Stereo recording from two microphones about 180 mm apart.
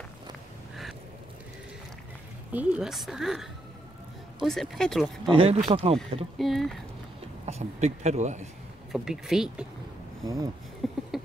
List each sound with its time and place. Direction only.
2.5 s speech: 10° right (ahead or behind)
5.3 s speech: 30° right (ahead or behind)
6.3 s speech: centre (ahead or behind)
7.4 s speech: 40° right (ahead or behind)
8.9 s speech: centre (ahead or behind)
10.2 s speech: 20° right (ahead or behind)
10.8 s a sound: centre (ahead or behind)